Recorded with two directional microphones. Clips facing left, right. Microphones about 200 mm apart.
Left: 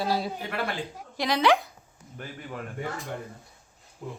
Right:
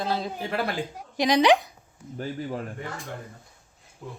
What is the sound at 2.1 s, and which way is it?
Speech, 35° right (ahead or behind).